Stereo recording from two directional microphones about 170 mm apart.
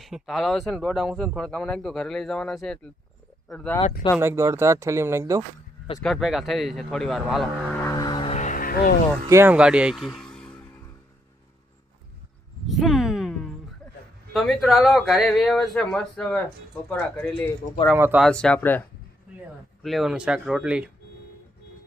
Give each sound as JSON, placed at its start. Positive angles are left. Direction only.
{"t": 0.0, "sound": "speech", "side_deg": 0}
{"t": 4.2, "sound": "speech", "side_deg": -15}
{"t": 6.0, "sound": "speech", "side_deg": 0}
{"t": 7.8, "sound": "vehicle", "side_deg": 20}
{"t": 9.3, "sound": "speech", "side_deg": -10}
{"t": 12.6, "sound": "a sound", "side_deg": 0}
{"t": 14.3, "sound": "speech", "side_deg": 0}
{"t": 17.9, "sound": "speech", "side_deg": -10}
{"t": 18.2, "sound": "speech", "side_deg": 5}
{"t": 19.8, "sound": "speech", "side_deg": 0}